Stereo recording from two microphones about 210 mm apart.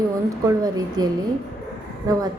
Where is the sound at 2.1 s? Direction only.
15° right (ahead or behind).